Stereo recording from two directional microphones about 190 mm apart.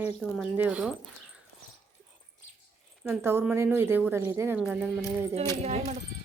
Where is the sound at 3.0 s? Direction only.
10° right (ahead or behind).